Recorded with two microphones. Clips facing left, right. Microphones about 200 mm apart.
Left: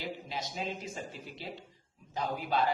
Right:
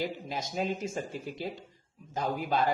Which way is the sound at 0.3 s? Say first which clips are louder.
Right 5 dB; 45° right (ahead or behind).